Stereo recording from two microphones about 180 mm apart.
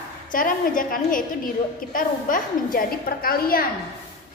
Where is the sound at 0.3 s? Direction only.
50° left (ahead or behind).